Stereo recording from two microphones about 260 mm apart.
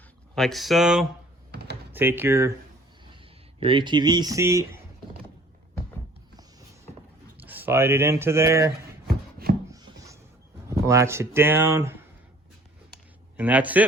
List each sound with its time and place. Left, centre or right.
0.3 s speech: centre
1.5 s typing: right
1.9 s speech: centre
3.0 s speech: centre
7.3 s speech: centre
9.0 s a sound: right
9.7 s a sound: centre
10.7 s speech: centre
13.3 s speech: centre